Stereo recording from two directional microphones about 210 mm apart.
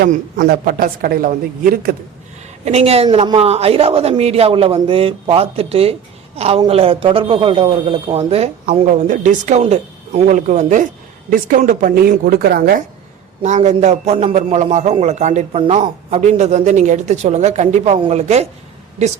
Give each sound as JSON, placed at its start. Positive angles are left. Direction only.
{"t": 0.0, "sound": "speech", "side_deg": -45}
{"t": 2.6, "sound": "a woman's voice", "side_deg": -30}
{"t": 13.4, "sound": "a man's voice", "side_deg": -35}